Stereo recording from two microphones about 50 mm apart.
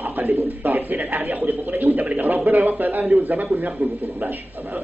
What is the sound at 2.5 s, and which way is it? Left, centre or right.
A man's voice, right.